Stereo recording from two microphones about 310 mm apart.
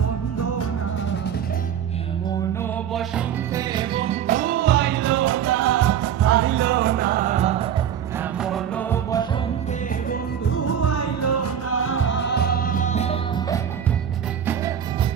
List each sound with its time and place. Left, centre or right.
0.3 s music: left
2.9 s music: centre; by 7.7 s right
8.2 s music: centre
10.5 s music: left; by 13.6 s centre